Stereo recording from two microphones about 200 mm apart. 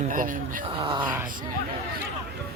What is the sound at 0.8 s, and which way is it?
Speech, 25° right (ahead or behind).